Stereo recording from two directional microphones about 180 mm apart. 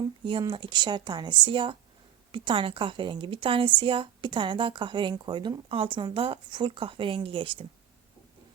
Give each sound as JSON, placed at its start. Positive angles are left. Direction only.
{"t": 0.0, "sound": "a woman's voice", "side_deg": -25}